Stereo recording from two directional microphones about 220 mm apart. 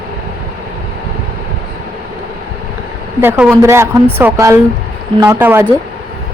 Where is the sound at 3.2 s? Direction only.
10° right (ahead or behind).